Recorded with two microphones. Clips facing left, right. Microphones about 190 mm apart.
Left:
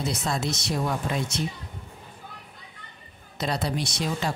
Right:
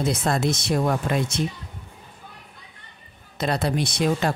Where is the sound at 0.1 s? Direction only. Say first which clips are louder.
Right 5 dB; 55° right (ahead or behind).